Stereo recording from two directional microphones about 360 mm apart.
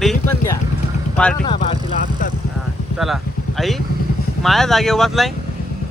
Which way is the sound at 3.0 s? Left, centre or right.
Centre.